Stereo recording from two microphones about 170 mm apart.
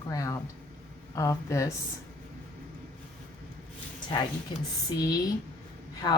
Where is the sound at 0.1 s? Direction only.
20° left (ahead or behind).